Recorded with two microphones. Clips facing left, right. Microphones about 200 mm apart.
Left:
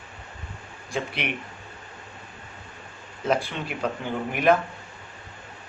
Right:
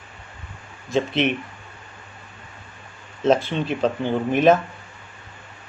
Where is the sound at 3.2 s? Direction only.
25° right (ahead or behind).